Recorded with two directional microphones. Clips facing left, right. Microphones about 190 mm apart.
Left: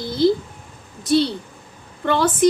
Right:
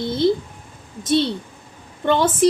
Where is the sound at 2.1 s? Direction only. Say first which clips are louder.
Even; 25° right (ahead or behind).